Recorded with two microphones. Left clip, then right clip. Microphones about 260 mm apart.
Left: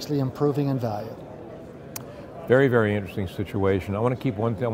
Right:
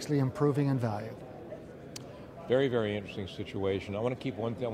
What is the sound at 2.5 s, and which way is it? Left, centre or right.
Speech, left.